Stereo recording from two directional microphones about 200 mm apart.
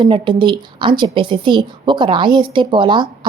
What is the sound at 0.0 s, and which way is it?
A woman's voice, 25° right (ahead or behind).